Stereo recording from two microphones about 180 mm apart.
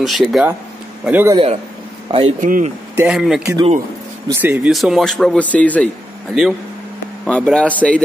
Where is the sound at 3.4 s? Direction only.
15° right (ahead or behind).